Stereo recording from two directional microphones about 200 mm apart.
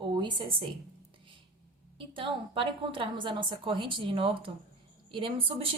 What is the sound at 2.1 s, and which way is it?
A woman's voice, 25° right (ahead or behind).